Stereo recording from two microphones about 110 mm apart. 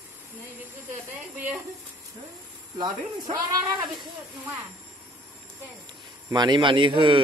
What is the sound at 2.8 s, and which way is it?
Speech, 40° right (ahead or behind).